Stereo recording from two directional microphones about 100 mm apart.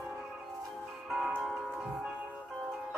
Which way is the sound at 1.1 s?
5° right (ahead or behind).